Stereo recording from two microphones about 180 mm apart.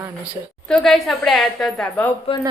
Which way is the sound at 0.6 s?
Centre (ahead or behind).